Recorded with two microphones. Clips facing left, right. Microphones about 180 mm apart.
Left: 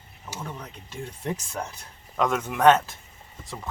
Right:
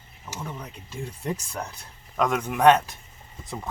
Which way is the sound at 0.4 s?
10° right (ahead or behind).